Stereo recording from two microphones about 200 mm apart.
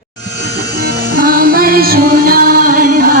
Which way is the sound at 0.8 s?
50° right (ahead or behind).